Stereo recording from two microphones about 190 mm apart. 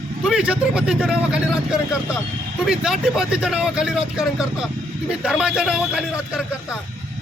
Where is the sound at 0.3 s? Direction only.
5° right (ahead or behind).